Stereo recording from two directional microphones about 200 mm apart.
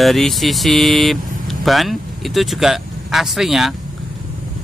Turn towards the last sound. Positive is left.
turn(degrees=0)  # may be behind; listen again after turning